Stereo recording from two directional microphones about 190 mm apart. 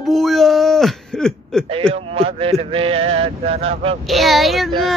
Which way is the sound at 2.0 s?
30° right (ahead or behind).